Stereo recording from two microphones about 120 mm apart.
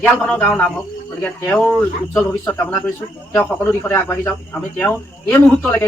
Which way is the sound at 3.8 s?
20° left (ahead or behind).